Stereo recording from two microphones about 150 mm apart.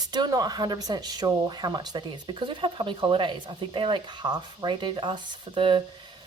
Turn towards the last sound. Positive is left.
turn(degrees=-35)  # may be behind; listen again after turning